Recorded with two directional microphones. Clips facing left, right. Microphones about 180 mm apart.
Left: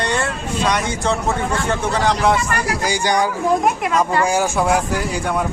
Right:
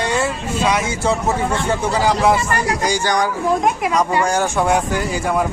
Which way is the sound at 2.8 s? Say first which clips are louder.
Left 1 dB; 10° left (ahead or behind).